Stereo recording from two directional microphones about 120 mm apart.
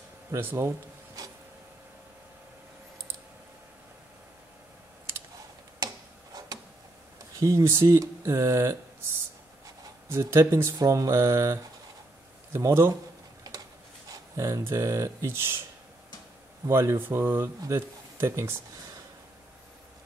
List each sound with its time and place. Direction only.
0.3 s speech: 20° right (ahead or behind)
7.3 s speech: 25° right (ahead or behind)
10.0 s speech: 20° right (ahead or behind)
14.3 s speech: 25° right (ahead or behind)
16.6 s speech: 20° right (ahead or behind)